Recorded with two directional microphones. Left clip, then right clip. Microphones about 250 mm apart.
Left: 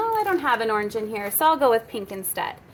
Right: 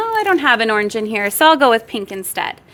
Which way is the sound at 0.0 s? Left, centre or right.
Right.